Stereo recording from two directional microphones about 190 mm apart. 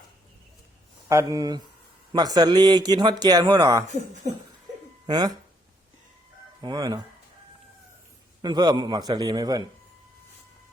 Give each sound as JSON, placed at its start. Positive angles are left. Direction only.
{"t": 1.0, "sound": "speech", "side_deg": -20}
{"t": 5.0, "sound": "speech", "side_deg": -20}
{"t": 6.6, "sound": "speech", "side_deg": -20}
{"t": 8.4, "sound": "speech", "side_deg": -20}